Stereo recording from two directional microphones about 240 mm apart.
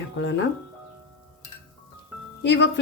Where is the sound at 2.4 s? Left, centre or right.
Left.